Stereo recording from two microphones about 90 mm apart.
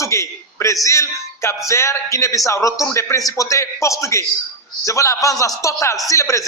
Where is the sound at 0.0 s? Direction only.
35° left (ahead or behind).